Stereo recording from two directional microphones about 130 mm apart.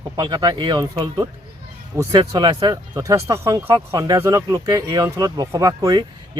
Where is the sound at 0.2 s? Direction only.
30° right (ahead or behind).